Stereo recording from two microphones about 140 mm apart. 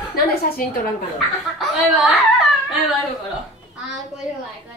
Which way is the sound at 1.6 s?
Centre (ahead or behind).